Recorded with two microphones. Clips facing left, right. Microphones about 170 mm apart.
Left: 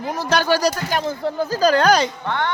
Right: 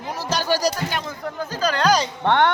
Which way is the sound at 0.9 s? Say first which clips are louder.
Left 6 dB; 30° left (ahead or behind).